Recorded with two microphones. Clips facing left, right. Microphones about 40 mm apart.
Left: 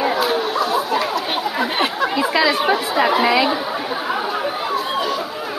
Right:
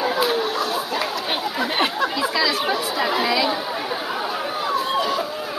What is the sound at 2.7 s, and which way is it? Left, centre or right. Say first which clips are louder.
Speech: left 5 dB; left.